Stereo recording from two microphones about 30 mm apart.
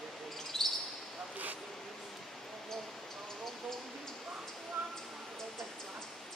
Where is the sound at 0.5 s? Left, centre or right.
Centre.